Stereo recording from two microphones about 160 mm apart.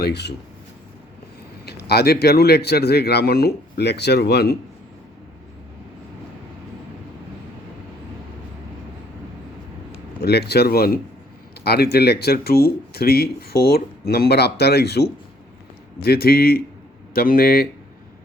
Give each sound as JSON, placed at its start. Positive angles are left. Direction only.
{"t": 0.0, "sound": "a man's voice", "side_deg": 90}
{"t": 1.6, "sound": "a man's voice", "side_deg": 90}
{"t": 10.2, "sound": "speech", "side_deg": 85}
{"t": 11.6, "sound": "a man's voice", "side_deg": 85}